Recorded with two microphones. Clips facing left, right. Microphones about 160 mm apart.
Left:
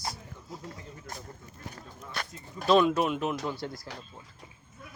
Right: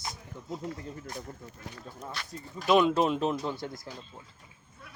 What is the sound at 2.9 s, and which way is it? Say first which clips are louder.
Speech: right 2 dB; 30° right (ahead or behind).